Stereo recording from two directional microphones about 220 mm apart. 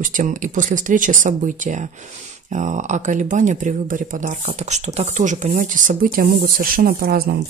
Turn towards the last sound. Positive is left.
turn(degrees=-45)  # may be behind; listen again after turning